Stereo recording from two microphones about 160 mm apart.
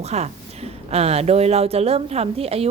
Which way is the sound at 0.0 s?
40° right (ahead or behind).